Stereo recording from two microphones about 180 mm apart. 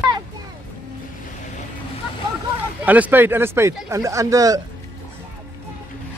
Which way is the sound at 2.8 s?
10° right (ahead or behind).